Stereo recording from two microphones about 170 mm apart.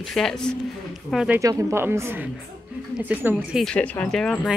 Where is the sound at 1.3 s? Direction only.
15° right (ahead or behind).